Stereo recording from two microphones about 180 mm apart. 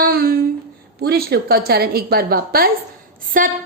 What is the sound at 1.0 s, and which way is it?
Speech, 60° right (ahead or behind).